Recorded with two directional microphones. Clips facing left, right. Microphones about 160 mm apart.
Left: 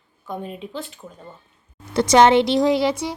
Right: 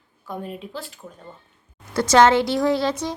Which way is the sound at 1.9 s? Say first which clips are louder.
Left 2 dB; 15° left (ahead or behind).